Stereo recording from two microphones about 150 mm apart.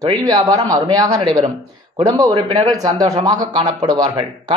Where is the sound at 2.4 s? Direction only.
40° right (ahead or behind).